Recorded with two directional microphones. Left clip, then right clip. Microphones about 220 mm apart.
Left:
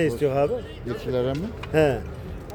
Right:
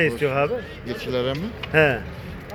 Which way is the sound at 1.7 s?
10° left (ahead or behind).